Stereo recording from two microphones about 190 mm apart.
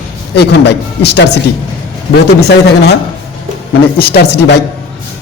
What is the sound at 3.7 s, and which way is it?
Speech, 55° left (ahead or behind).